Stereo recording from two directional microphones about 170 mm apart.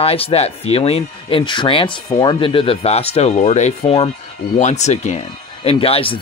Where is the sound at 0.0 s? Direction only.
35° left (ahead or behind).